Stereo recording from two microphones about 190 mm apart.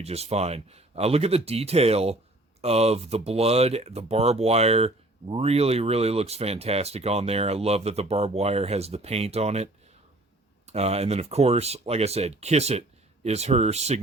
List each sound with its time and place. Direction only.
0.0 s speech: 35° right (ahead or behind)
10.7 s speech: 35° right (ahead or behind)